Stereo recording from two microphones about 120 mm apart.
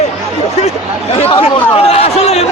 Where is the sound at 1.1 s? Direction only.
55° left (ahead or behind).